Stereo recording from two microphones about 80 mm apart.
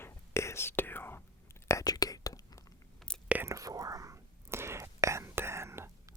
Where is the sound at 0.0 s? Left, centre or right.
Left.